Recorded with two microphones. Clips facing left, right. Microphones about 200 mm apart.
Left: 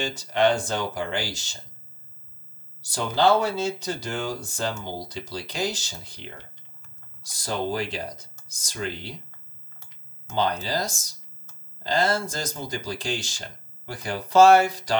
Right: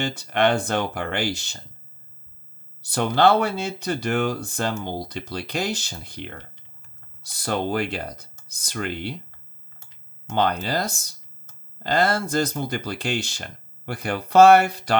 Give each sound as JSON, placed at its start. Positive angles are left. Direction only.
{"t": 0.0, "sound": "speech", "side_deg": -60}
{"t": 2.8, "sound": "speech", "side_deg": -60}
{"t": 10.2, "sound": "speech", "side_deg": -60}